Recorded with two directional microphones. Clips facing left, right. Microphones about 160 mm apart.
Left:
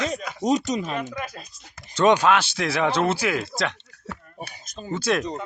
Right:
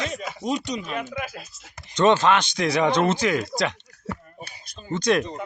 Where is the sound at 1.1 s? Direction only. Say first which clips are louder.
Right 1 dB; 5° right (ahead or behind).